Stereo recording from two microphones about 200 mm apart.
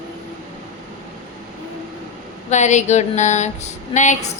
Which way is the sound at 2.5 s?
35° left (ahead or behind).